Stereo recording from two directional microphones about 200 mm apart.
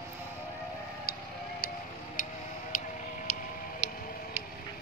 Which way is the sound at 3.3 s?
35° left (ahead or behind).